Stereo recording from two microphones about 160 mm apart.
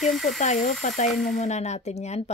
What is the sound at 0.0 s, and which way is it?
Speech, centre (ahead or behind).